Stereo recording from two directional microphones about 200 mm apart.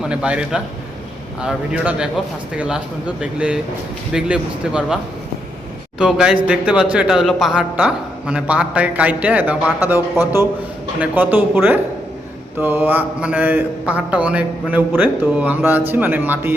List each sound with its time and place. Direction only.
0.0 s speech: 5° right (ahead or behind)
6.0 s a man's voice: 5° right (ahead or behind)